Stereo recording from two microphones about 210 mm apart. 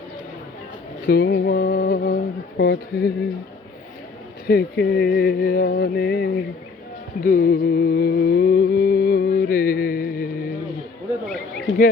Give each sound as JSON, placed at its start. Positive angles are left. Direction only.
{"t": 1.0, "sound": "speech", "side_deg": 45}
{"t": 4.4, "sound": "speech", "side_deg": 50}
{"t": 7.2, "sound": "music", "side_deg": 40}